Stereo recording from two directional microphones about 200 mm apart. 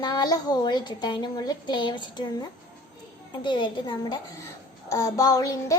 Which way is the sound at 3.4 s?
25° left (ahead or behind).